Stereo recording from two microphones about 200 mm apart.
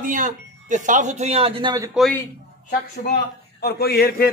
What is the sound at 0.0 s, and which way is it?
Speech, 40° right (ahead or behind).